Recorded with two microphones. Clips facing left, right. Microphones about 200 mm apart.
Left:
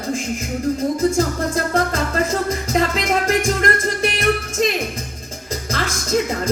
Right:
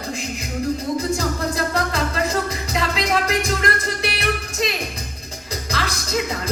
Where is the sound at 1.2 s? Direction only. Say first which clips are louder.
Left 3 dB; 50° left (ahead or behind).